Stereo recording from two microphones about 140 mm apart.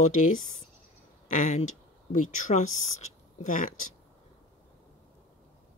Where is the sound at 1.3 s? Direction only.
65° left (ahead or behind).